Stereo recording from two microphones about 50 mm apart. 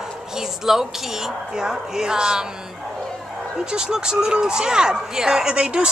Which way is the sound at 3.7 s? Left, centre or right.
Centre.